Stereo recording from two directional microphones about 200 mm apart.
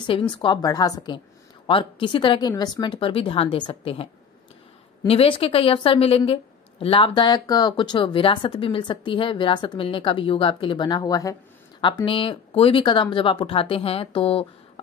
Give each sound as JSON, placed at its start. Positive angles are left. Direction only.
{"t": 0.0, "sound": "a woman's voice", "side_deg": 25}